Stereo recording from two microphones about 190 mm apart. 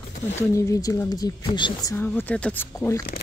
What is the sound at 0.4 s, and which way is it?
A woman's voice, 15° left (ahead or behind).